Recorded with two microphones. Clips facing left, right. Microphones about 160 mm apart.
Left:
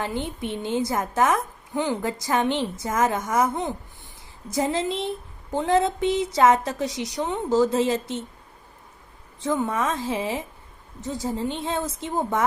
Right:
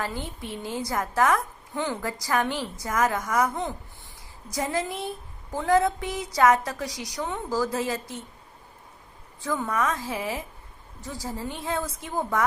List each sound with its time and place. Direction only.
0.0 s a woman's voice: 20° left (ahead or behind)
9.4 s a woman's voice: 20° left (ahead or behind)